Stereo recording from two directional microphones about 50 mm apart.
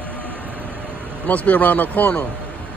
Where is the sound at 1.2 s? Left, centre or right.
Left.